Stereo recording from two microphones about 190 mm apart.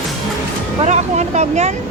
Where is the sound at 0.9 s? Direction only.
40° right (ahead or behind).